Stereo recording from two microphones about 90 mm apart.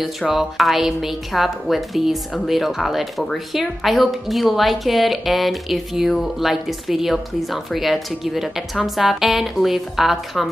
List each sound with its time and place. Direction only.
0.0 s speech: centre (ahead or behind)